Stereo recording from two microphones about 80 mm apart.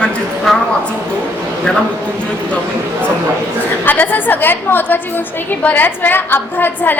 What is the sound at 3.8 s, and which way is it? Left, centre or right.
A woman's voice, left.